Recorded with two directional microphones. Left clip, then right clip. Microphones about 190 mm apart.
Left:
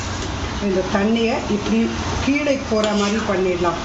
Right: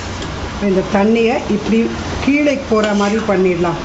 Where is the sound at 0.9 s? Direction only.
50° right (ahead or behind).